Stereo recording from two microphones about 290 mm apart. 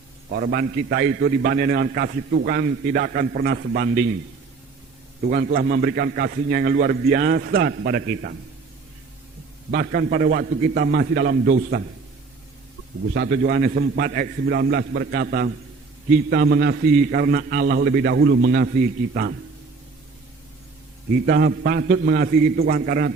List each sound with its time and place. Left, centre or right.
0.3 s a man's voice: right
5.3 s a man's voice: right
9.7 s a man's voice: right
13.1 s a man's voice: right
21.2 s a man's voice: right